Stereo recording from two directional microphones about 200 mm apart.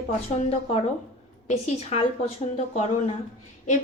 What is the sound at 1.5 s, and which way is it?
Speech, 35° left (ahead or behind).